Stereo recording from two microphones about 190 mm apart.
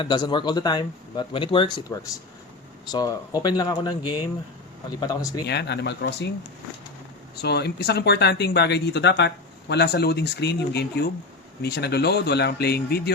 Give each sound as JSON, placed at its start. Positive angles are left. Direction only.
{"t": 0.0, "sound": "speech", "side_deg": 25}
{"t": 5.5, "sound": "speech", "side_deg": 60}
{"t": 7.4, "sound": "speech", "side_deg": 60}